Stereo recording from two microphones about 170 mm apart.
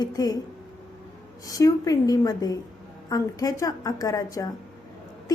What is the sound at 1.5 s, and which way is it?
A woman's voice, 20° left (ahead or behind).